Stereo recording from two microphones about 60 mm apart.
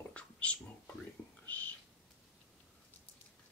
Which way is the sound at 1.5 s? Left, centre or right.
Left.